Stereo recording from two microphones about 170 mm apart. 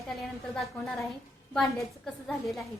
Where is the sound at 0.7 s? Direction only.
15° left (ahead or behind).